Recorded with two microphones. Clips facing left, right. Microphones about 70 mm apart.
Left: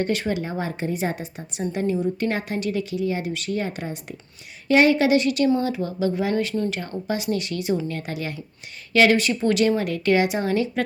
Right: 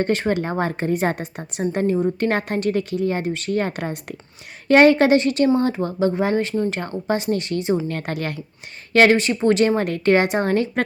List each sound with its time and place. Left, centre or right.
0.0 s a woman's voice: right
7.9 s a woman's voice: right
8.9 s speech: right
9.1 s a woman's voice: right